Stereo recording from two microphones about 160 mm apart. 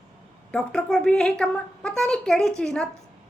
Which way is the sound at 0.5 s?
5° left (ahead or behind).